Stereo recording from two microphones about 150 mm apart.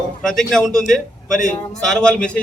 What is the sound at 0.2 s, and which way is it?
A man's voice, centre (ahead or behind).